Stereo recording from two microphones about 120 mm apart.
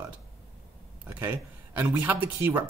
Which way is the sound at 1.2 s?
15° right (ahead or behind).